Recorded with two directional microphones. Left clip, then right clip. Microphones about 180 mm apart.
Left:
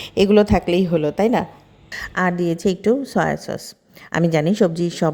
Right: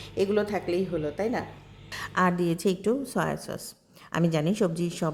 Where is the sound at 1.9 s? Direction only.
20° left (ahead or behind).